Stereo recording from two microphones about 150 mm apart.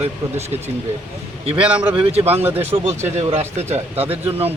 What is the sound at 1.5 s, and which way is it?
Speech, 10° right (ahead or behind).